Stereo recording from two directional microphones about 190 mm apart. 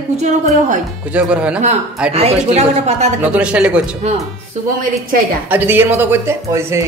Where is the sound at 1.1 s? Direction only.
5° right (ahead or behind).